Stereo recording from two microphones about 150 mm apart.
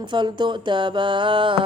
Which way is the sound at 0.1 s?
30° right (ahead or behind).